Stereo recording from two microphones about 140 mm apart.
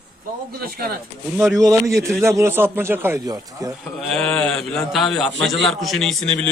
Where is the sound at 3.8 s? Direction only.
5° left (ahead or behind).